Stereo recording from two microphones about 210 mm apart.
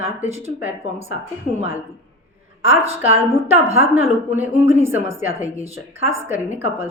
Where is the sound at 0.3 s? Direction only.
30° right (ahead or behind).